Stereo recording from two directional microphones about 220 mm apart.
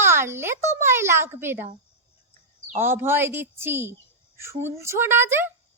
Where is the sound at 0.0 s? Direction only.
10° right (ahead or behind).